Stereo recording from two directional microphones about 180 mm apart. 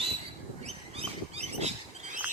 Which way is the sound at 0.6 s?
35° right (ahead or behind).